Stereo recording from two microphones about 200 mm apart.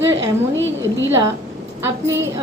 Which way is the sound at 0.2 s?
65° right (ahead or behind).